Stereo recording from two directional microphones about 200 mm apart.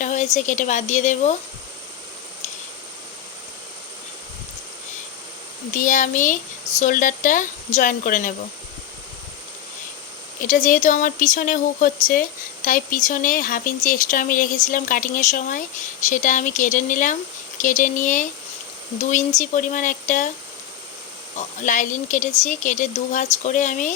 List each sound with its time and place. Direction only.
0.0 s a sound: 35° left (ahead or behind)
0.3 s speech: 35° left (ahead or behind)
5.7 s speech: 40° left (ahead or behind)
10.4 s speech: 40° left (ahead or behind)
21.3 s speech: 40° left (ahead or behind)